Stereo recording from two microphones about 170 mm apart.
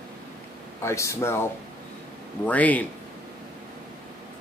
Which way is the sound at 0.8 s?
15° left (ahead or behind).